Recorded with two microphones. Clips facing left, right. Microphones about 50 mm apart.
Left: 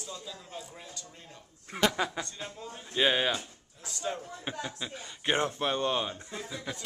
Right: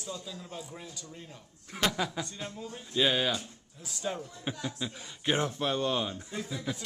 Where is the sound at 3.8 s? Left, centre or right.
Centre.